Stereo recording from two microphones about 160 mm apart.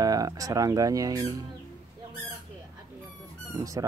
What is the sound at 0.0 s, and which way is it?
Speech, 25° right (ahead or behind).